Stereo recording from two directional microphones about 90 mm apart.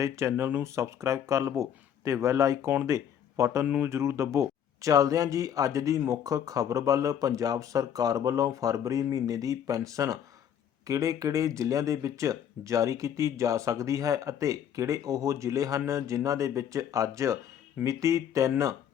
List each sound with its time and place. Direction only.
0.0 s speech: 35° right (ahead or behind)